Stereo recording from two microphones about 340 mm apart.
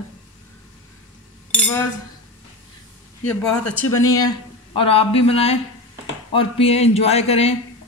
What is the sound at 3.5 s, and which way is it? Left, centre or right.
Speech, centre.